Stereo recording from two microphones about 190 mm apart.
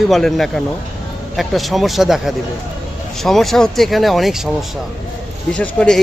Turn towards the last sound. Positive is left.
turn(degrees=5)  # may be behind; listen again after turning